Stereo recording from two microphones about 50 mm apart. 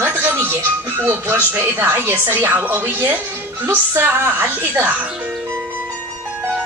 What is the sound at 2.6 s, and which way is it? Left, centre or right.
Speech, right.